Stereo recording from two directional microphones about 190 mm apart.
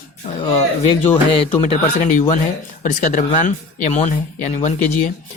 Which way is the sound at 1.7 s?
40° left (ahead or behind).